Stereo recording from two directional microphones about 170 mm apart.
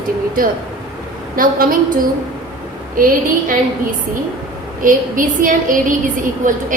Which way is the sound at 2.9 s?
55° right (ahead or behind).